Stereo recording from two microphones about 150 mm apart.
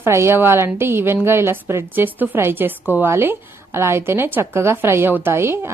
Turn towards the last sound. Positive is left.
turn(degrees=-15)  # may be behind; listen again after turning